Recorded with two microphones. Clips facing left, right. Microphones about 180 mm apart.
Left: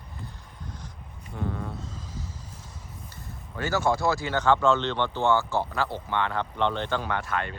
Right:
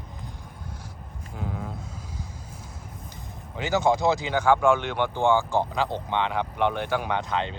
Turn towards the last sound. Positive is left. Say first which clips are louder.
# right 2 dB
turn(degrees=-20)  # may be behind; listen again after turning